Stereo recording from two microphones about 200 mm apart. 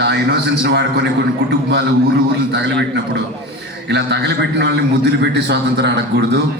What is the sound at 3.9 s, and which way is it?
A man's voice, 60° right (ahead or behind).